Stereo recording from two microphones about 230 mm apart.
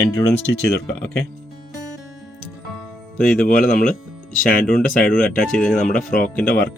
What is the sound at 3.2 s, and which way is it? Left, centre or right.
Speech, left.